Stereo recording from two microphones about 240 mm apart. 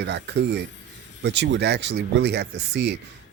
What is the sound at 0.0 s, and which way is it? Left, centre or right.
Speech, right.